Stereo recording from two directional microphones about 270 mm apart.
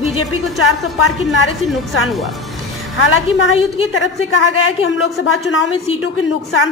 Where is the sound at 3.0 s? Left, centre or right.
Left.